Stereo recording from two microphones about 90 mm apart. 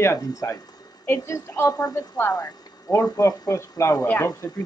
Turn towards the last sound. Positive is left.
turn(degrees=35)  # may be behind; listen again after turning